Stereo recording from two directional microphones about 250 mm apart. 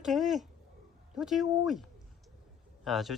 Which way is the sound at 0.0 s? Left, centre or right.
Centre.